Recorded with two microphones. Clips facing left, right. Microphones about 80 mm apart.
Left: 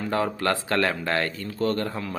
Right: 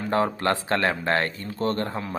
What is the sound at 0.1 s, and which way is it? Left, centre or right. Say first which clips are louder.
A man's voice: right 2 dB; right.